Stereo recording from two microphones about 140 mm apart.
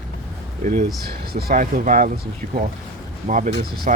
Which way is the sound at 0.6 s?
65° right (ahead or behind).